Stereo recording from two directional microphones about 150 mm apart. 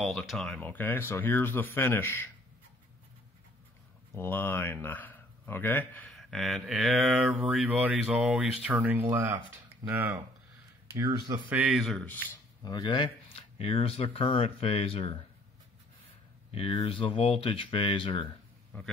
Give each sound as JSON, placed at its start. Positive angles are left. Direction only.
{"t": 0.0, "sound": "speech", "side_deg": 0}
{"t": 4.1, "sound": "speech", "side_deg": 15}
{"t": 6.1, "sound": "speech", "side_deg": 0}
{"t": 11.4, "sound": "a man's voice", "side_deg": -5}
{"t": 12.1, "sound": "speech", "side_deg": 10}
{"t": 12.6, "sound": "speech", "side_deg": 30}
{"t": 16.5, "sound": "speech", "side_deg": 40}
{"t": 18.7, "sound": "speech", "side_deg": 10}